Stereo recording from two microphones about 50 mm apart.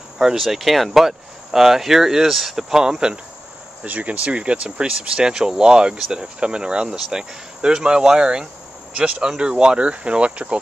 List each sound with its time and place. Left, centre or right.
0.2 s speech: centre
3.8 s speech: right
5.9 s speech: centre
6.2 s speech: centre